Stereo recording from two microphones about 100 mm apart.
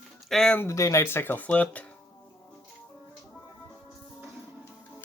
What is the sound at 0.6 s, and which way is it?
Speech, 30° left (ahead or behind).